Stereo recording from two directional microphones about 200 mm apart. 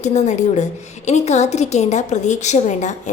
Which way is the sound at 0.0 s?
35° left (ahead or behind).